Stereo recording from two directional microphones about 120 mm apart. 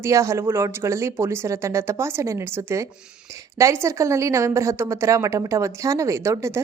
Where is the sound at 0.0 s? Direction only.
25° right (ahead or behind).